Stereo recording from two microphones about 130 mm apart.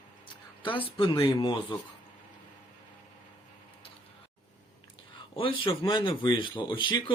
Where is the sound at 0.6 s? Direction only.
40° left (ahead or behind).